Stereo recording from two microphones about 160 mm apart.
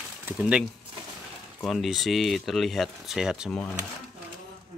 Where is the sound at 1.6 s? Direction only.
Centre (ahead or behind).